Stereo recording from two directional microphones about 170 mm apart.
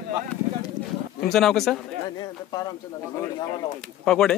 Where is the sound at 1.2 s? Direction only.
Centre (ahead or behind).